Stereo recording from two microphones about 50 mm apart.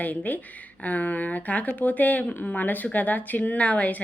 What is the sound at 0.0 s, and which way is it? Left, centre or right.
Speech, left.